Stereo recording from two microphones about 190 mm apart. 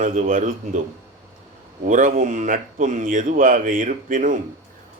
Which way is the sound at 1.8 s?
40° right (ahead or behind).